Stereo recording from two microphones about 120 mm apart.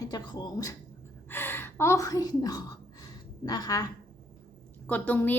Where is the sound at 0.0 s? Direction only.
35° left (ahead or behind).